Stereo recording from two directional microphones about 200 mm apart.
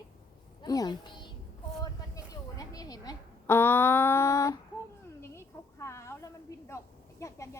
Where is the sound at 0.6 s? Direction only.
20° left (ahead or behind).